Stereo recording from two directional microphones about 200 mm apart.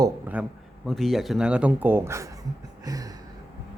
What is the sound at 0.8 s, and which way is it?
A man's voice, centre (ahead or behind).